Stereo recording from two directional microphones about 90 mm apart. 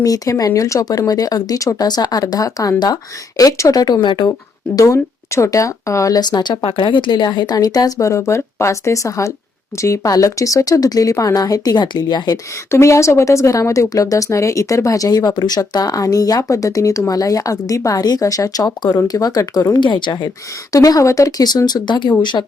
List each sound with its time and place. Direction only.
0.0 s speech: 40° left (ahead or behind); by 4.3 s 60° left (ahead or behind)
4.7 s speech: 40° left (ahead or behind)
6.7 s speech: 70° left (ahead or behind); by 12.4 s 50° left (ahead or behind)
12.7 s speech: 35° left (ahead or behind)
19.8 s a woman's voice: 60° left (ahead or behind)
20.7 s a woman's voice: 40° left (ahead or behind); by 22.4 s 55° left (ahead or behind)